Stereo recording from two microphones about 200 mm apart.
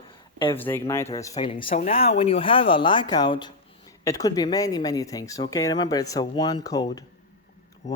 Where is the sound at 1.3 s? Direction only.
25° left (ahead or behind).